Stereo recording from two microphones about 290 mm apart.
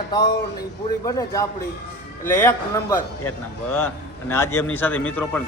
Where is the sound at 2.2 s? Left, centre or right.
Centre.